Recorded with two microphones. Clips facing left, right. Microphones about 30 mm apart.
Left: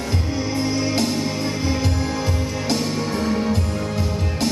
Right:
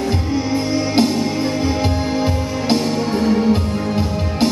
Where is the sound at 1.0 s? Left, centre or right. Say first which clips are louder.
Right 4 dB; centre.